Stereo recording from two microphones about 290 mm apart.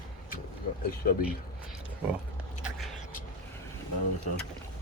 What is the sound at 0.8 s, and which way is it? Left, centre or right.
Speech, left.